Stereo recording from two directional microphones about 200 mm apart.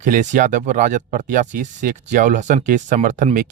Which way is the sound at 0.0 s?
40° right (ahead or behind).